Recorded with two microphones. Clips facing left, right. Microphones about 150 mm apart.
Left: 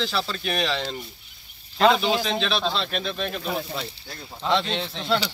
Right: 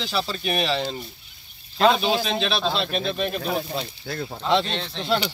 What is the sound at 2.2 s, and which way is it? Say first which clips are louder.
Speech: right 1 dB; 15° right (ahead or behind).